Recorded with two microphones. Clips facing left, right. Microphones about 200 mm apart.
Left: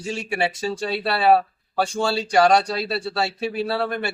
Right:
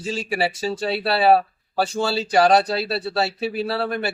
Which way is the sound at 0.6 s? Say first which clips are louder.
Right 1 dB; 25° right (ahead or behind).